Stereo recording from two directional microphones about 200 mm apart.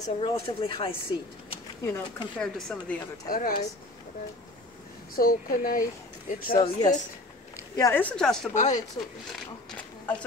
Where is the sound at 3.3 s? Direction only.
45° left (ahead or behind).